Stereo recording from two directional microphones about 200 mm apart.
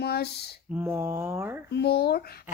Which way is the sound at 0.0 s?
55° left (ahead or behind).